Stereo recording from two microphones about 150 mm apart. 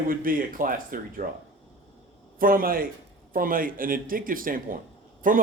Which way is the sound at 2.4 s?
70° right (ahead or behind).